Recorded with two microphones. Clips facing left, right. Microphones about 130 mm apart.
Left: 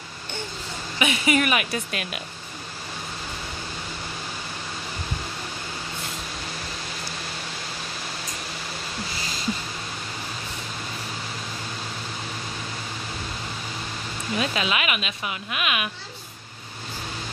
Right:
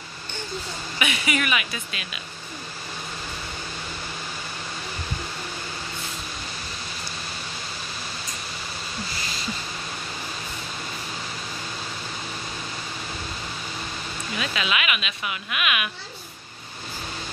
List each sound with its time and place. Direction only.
0.9 s speech: 35° left (ahead or behind); by 2.2 s 55° left (ahead or behind)
14.3 s speech: 35° left (ahead or behind)